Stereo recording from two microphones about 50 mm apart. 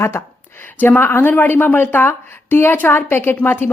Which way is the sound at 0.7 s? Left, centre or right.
Left.